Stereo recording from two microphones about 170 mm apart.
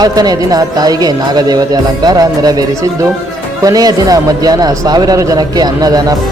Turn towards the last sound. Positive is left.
turn(degrees=-20)  # may be behind; listen again after turning